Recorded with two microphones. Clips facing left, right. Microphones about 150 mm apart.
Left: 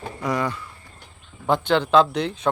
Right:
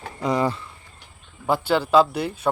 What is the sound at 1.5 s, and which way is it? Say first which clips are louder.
Speech: left 1 dB; 5° right (ahead or behind).